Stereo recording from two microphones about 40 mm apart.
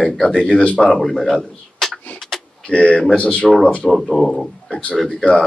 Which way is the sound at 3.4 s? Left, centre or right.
Centre.